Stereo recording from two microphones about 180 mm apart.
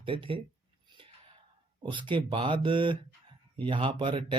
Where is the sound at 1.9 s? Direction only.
25° right (ahead or behind).